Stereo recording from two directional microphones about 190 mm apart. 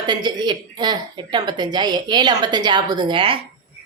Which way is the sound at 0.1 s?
20° right (ahead or behind).